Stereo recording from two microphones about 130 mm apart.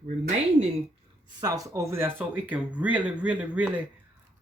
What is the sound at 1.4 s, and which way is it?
Speech, 30° right (ahead or behind).